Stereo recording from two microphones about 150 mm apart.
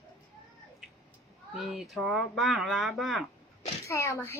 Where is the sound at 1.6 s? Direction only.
Centre (ahead or behind).